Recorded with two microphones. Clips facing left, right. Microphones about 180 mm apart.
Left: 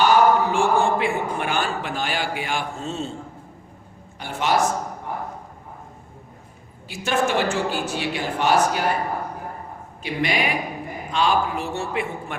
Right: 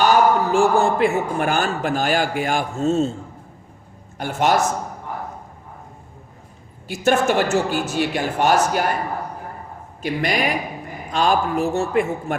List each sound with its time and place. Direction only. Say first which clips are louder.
0.0 s a man's voice: right 1 dB; 40° right (ahead or behind)
4.2 s a man's voice: right 3 dB; 45° right (ahead or behind)
6.8 s a man's voice: right 5 dB; 45° right (ahead or behind)
10.0 s a man's voice: right 2 dB; 40° right (ahead or behind)